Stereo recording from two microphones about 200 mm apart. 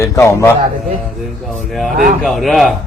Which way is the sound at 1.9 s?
40° right (ahead or behind).